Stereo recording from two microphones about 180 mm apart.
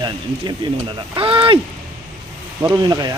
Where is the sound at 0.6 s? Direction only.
25° right (ahead or behind).